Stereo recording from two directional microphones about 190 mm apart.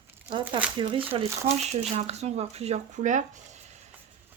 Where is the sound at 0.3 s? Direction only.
25° right (ahead or behind).